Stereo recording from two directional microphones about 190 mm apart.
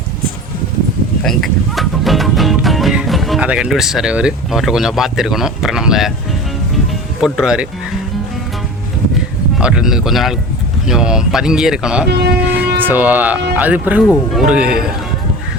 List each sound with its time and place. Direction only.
1.2 s speech: centre (ahead or behind)
7.2 s speech: 5° right (ahead or behind)
9.6 s speech: 5° right (ahead or behind)
12.0 s speech: 60° right (ahead or behind)
12.8 s speech: 10° right (ahead or behind)